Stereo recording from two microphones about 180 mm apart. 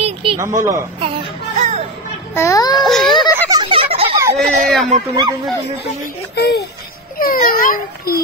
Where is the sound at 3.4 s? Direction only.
25° right (ahead or behind).